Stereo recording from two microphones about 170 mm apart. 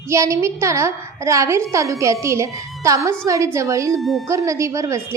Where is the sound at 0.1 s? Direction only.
15° right (ahead or behind).